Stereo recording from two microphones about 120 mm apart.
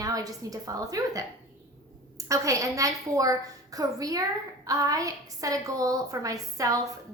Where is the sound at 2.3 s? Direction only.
25° right (ahead or behind).